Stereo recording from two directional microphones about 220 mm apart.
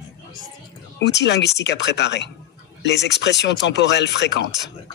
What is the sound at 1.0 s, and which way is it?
Speech, 50° left (ahead or behind).